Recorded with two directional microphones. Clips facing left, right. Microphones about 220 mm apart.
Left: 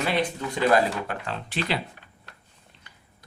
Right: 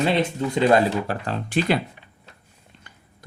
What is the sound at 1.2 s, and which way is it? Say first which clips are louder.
Speech: right 7 dB; 50° right (ahead or behind).